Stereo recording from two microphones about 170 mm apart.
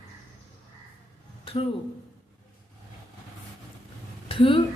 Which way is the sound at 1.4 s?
35° left (ahead or behind).